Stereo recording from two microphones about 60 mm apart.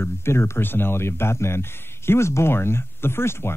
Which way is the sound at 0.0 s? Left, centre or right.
Left.